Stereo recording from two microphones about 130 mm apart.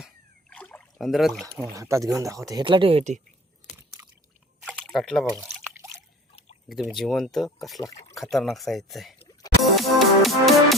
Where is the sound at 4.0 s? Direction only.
20° right (ahead or behind).